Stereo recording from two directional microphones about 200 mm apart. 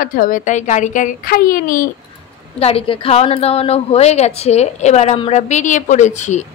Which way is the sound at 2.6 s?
30° left (ahead or behind).